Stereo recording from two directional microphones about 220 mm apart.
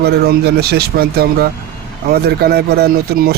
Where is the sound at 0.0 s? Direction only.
45° right (ahead or behind).